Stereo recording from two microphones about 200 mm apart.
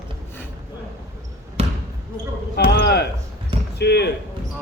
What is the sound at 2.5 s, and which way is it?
Speech, 55° left (ahead or behind).